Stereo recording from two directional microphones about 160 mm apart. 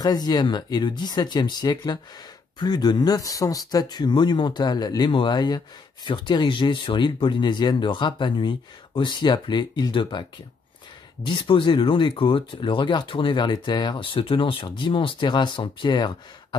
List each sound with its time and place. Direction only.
0.0 s speech: 25° left (ahead or behind)
11.2 s speech: 30° left (ahead or behind)